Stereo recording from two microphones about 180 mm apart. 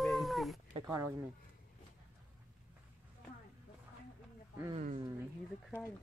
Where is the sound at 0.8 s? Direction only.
15° right (ahead or behind).